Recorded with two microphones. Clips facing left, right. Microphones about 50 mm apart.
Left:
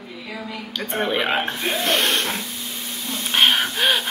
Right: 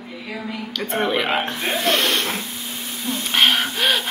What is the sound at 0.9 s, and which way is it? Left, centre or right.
A woman's voice, centre.